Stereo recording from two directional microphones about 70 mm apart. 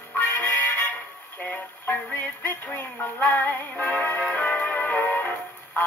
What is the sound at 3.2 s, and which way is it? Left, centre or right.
Music, left.